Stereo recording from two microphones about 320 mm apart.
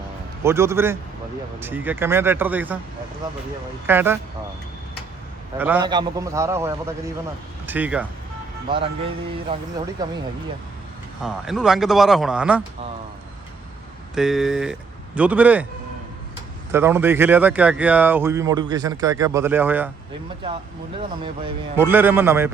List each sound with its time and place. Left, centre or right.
0.4 s speech: centre
3.8 s speech: centre
5.5 s speech: centre
7.7 s speech: centre
9.5 s speech: centre
11.2 s speech: centre
14.2 s speech: centre
16.7 s speech: centre
21.4 s speech: centre